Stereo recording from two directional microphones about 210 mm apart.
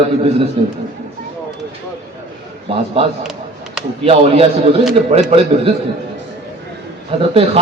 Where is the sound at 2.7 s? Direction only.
25° right (ahead or behind).